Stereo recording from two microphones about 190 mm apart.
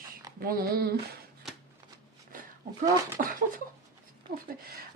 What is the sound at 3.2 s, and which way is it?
A woman's voice, 40° right (ahead or behind).